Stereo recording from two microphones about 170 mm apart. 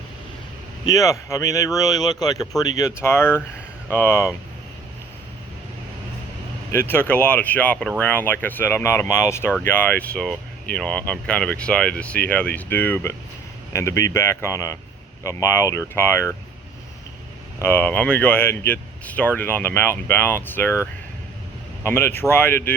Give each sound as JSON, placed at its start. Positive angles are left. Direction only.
{"t": 0.9, "sound": "speech", "side_deg": 20}
{"t": 6.7, "sound": "speech", "side_deg": 15}
{"t": 17.6, "sound": "speech", "side_deg": 10}
{"t": 21.8, "sound": "speech", "side_deg": 15}